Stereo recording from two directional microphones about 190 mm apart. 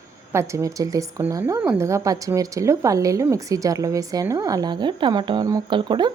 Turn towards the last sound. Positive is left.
turn(degrees=-25)  # may be behind; listen again after turning